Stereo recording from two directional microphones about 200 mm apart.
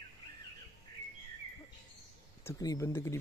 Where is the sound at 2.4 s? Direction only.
15° left (ahead or behind).